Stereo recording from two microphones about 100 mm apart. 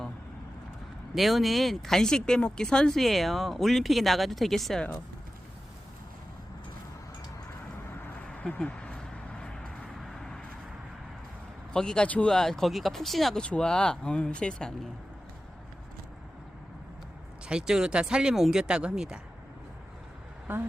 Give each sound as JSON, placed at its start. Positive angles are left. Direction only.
{"t": 1.1, "sound": "speech", "side_deg": 0}
{"t": 8.3, "sound": "vehicle", "side_deg": 10}
{"t": 11.7, "sound": "speech", "side_deg": 5}
{"t": 17.4, "sound": "speech", "side_deg": -10}